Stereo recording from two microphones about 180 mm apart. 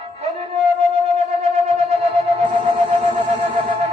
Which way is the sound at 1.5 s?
35° right (ahead or behind).